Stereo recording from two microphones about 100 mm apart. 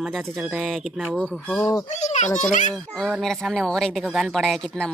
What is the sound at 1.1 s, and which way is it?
Speech, 10° left (ahead or behind).